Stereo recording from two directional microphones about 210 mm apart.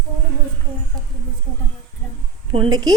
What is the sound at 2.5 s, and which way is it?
Speech, 25° right (ahead or behind).